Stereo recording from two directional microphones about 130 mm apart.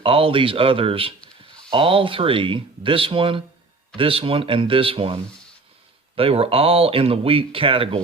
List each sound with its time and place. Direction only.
0.0 s speech: 45° right (ahead or behind)